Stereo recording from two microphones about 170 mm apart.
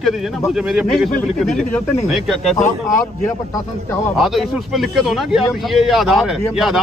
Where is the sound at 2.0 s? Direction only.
Centre (ahead or behind).